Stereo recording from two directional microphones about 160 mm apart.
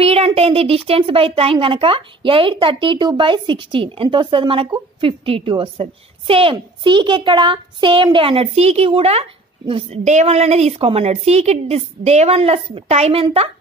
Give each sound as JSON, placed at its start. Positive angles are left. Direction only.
{"t": 0.0, "sound": "a child's voice", "side_deg": -40}